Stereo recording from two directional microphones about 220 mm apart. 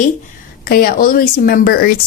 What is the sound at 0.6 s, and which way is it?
A woman's voice, 40° left (ahead or behind).